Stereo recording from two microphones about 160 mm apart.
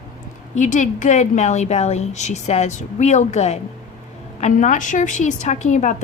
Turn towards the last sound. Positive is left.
turn(degrees=50)  # may be behind; listen again after turning